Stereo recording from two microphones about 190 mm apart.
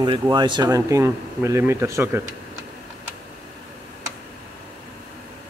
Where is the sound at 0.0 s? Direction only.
25° right (ahead or behind).